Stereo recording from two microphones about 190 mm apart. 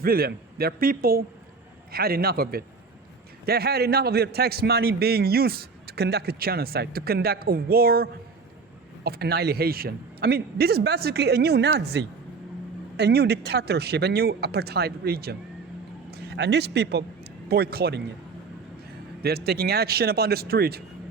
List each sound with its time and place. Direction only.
0.0 s a man's voice: 50° right (ahead or behind)
19.2 s a man's voice: 55° right (ahead or behind)